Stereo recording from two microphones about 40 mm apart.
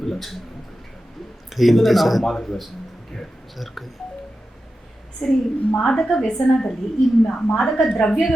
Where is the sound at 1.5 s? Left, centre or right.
Centre.